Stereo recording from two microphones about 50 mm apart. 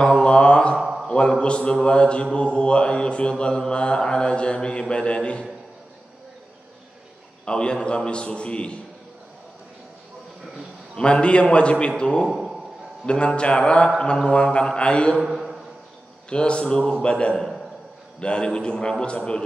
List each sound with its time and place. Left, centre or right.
0.0 s mantra: centre
0.7 s a sound: centre
1.0 s a sound: centre
1.4 s mantra: centre
7.4 s mantra: centre
11.0 s mantra: left
12.3 s a sound: centre
13.0 s a man's voice: left
13.4 s mantra: centre
15.2 s a sound: centre
16.3 s a man's voice: left
18.2 s mantra: centre